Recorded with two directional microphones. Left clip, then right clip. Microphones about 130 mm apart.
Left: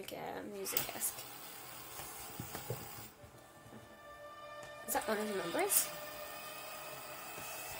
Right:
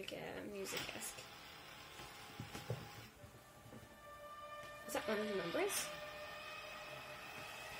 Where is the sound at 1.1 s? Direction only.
50° left (ahead or behind).